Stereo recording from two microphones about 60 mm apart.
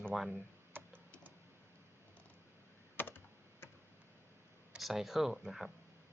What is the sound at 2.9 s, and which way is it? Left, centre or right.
Computer keyboard, left.